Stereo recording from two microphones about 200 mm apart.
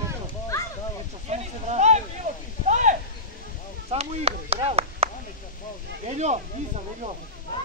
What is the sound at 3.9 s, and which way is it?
Chop, 30° right (ahead or behind).